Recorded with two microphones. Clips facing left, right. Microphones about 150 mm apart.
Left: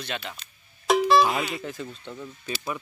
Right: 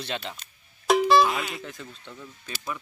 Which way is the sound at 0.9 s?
Centre (ahead or behind).